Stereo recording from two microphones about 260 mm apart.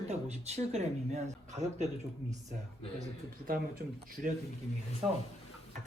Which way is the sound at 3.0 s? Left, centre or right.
Right.